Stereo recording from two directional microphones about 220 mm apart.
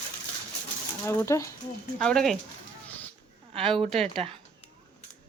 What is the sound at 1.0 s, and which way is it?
Speech, 10° left (ahead or behind).